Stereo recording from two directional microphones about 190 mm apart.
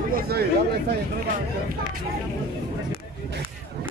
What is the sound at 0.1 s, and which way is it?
Speech, 55° right (ahead or behind).